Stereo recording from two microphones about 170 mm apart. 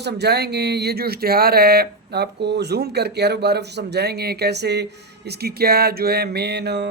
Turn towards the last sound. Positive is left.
turn(degrees=-85)